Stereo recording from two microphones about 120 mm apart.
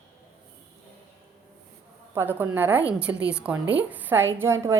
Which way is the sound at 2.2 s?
20° right (ahead or behind).